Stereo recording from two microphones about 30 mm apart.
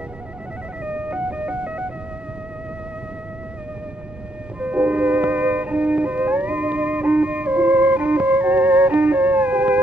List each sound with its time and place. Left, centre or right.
0.8 s music: right
4.6 s music: right